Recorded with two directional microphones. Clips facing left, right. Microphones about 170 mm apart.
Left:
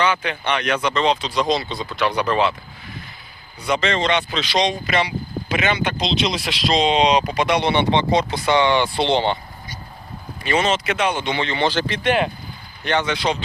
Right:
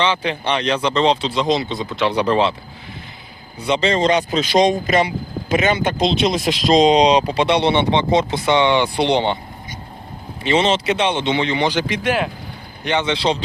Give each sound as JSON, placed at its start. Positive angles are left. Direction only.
{"t": 0.0, "sound": "speech", "side_deg": -30}
{"t": 3.6, "sound": "speech", "side_deg": -30}